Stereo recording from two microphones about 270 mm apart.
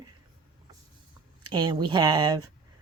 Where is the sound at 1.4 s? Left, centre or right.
Centre.